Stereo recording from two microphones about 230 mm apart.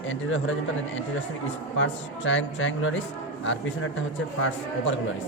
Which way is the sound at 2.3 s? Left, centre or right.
Left.